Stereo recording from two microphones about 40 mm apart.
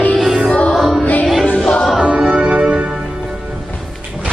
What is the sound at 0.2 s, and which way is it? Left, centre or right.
Music, centre.